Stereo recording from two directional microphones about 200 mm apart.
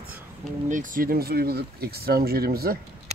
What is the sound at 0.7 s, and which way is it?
Speech, 40° right (ahead or behind).